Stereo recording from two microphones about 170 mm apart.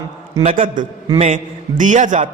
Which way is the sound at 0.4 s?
50° right (ahead or behind).